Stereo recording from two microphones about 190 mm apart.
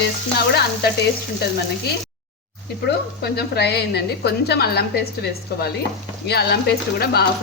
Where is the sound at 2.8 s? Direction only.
60° left (ahead or behind).